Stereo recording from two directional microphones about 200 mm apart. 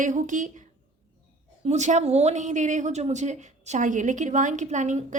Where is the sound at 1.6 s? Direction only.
35° right (ahead or behind).